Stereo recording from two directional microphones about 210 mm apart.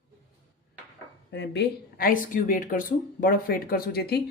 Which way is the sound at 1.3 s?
55° left (ahead or behind).